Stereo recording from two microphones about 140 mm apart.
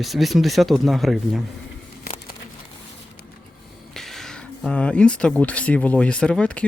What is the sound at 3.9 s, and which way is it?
Speech, centre (ahead or behind).